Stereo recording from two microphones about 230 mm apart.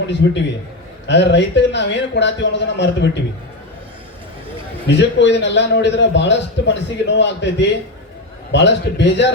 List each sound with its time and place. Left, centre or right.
0.1 s a man's voice: left
4.9 s a man's voice: left